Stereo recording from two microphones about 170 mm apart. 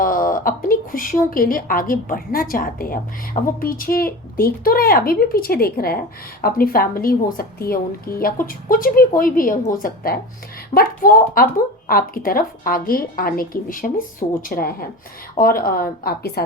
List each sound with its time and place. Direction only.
0.0 s speech: 55° left (ahead or behind)